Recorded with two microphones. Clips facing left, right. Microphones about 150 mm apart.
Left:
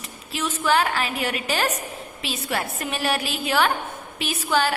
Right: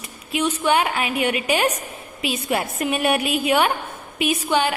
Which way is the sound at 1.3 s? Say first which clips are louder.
Right 4 dB; 15° right (ahead or behind).